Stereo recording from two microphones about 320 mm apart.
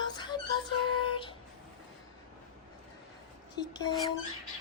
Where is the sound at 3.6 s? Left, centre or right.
Centre.